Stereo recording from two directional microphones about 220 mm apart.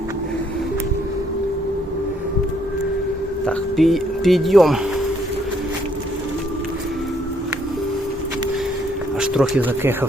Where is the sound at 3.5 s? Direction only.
Centre (ahead or behind).